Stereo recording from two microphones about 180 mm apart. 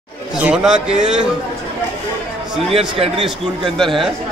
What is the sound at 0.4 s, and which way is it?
Speech, 5° right (ahead or behind).